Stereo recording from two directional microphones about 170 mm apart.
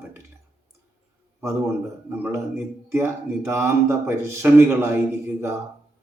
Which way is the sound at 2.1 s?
15° right (ahead or behind).